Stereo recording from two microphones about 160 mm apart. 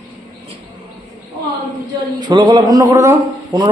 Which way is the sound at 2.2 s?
30° right (ahead or behind).